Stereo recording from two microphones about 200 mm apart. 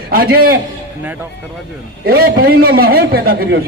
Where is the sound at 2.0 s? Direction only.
50° right (ahead or behind).